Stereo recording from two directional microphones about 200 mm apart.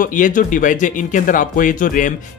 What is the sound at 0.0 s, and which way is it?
Speech, 40° left (ahead or behind).